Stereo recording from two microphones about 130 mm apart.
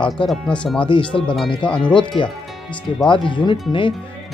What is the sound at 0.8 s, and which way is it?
Speech, 40° left (ahead or behind).